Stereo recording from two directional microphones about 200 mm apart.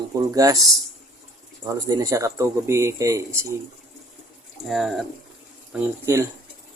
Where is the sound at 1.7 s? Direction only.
15° right (ahead or behind).